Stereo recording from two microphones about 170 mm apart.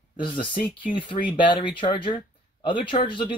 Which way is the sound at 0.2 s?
30° left (ahead or behind).